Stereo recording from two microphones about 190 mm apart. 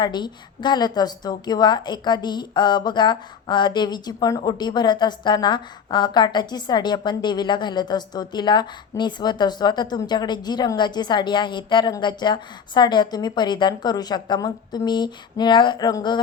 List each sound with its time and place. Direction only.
0.0 s a woman's voice: 25° left (ahead or behind)